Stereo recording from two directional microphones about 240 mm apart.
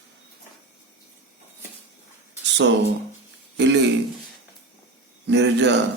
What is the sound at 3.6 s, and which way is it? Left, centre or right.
Speech, right.